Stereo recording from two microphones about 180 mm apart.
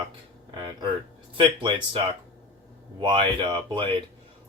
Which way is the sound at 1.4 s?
25° right (ahead or behind).